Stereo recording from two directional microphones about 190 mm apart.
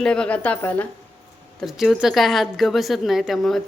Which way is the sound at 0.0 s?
5° left (ahead or behind).